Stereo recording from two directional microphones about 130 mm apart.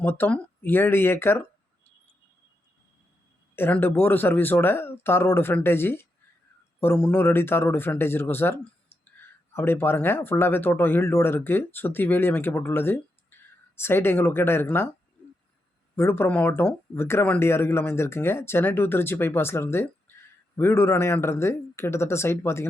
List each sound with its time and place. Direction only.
0.0 s speech: 15° left (ahead or behind)
3.5 s speech: 15° left (ahead or behind)
9.6 s speech: 15° left (ahead or behind)
16.0 s speech: 20° left (ahead or behind)